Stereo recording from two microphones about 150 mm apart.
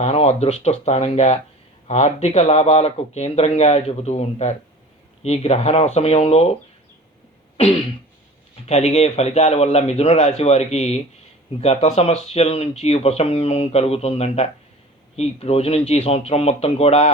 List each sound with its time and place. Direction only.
0.0 s speech: 45° left (ahead or behind)
7.5 s a sound: 40° left (ahead or behind)
8.6 s speech: 45° left (ahead or behind)